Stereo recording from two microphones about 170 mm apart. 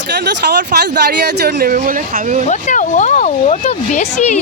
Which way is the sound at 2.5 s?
45° left (ahead or behind).